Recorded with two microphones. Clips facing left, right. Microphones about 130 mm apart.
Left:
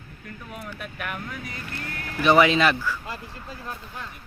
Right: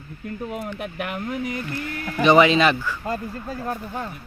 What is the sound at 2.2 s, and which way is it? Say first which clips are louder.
Speech: right 3 dB; centre (ahead or behind).